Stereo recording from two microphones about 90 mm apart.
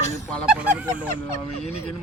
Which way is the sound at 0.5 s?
15° right (ahead or behind).